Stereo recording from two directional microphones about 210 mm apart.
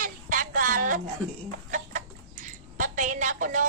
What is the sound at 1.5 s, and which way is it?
Chicken, 35° right (ahead or behind).